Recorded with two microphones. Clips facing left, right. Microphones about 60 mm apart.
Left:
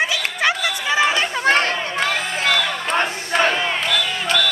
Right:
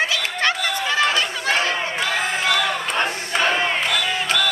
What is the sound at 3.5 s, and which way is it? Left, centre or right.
Crowd, centre.